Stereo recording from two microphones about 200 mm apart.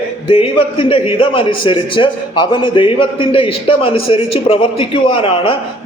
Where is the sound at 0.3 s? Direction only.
25° left (ahead or behind).